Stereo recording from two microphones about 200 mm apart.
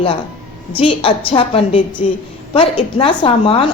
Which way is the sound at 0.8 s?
25° left (ahead or behind).